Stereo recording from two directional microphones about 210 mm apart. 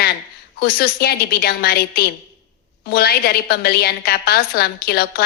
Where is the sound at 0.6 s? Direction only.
50° left (ahead or behind).